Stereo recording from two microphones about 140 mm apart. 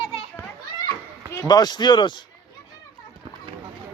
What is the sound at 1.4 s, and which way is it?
Speech, 30° left (ahead or behind).